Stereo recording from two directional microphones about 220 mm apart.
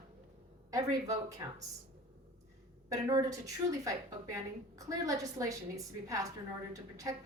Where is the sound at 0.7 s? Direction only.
15° right (ahead or behind).